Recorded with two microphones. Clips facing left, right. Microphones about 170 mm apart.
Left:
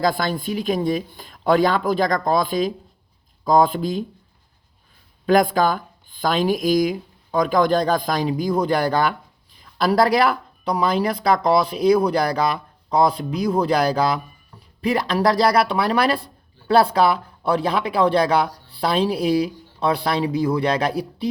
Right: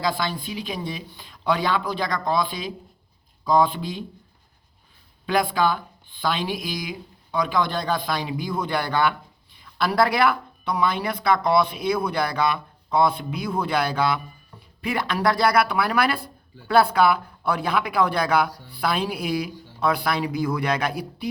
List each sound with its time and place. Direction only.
0.0 s speech: 45° left (ahead or behind)
5.2 s speech: 45° left (ahead or behind)